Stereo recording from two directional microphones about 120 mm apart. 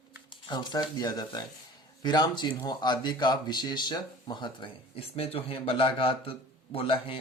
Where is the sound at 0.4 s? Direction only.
40° left (ahead or behind).